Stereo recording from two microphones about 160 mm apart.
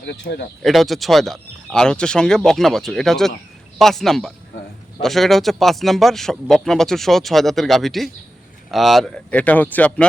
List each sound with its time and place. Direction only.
0.0 s speech: 90° left
0.6 s speech: centre (ahead or behind)